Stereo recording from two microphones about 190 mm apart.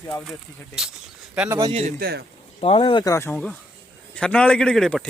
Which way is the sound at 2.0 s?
60° right (ahead or behind).